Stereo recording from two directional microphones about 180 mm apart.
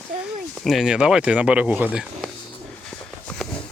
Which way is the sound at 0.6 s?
Centre (ahead or behind).